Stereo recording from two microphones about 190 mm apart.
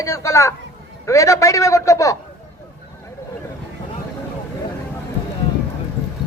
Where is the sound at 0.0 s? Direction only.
15° left (ahead or behind).